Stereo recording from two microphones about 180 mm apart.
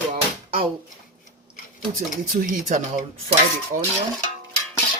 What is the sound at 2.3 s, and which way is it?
Speech, 50° right (ahead or behind).